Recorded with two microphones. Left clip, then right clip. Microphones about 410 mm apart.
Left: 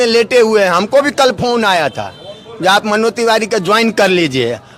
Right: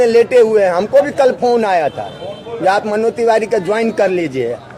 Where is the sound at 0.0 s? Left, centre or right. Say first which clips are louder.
Right 1 dB; left.